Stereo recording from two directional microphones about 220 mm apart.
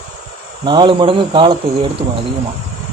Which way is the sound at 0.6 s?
20° right (ahead or behind).